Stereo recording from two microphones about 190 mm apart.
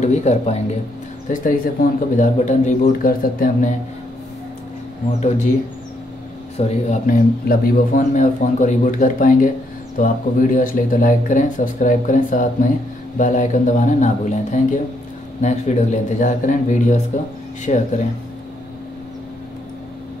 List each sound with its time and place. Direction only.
0.0 s speech: 40° left (ahead or behind)
6.9 s speech: 45° left (ahead or behind)